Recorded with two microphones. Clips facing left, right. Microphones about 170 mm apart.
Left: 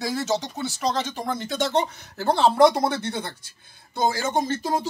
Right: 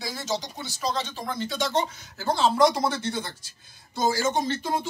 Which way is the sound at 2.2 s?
60° left (ahead or behind).